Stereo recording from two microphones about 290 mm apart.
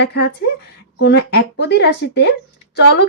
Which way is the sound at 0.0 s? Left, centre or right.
Left.